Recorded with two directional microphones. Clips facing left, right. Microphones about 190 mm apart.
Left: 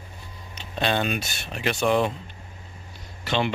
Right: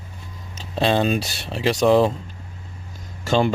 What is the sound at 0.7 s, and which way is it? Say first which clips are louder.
Speech: right 6 dB; 30° right (ahead or behind).